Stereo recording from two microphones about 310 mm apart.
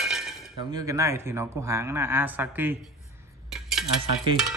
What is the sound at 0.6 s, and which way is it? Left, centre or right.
Speech, centre.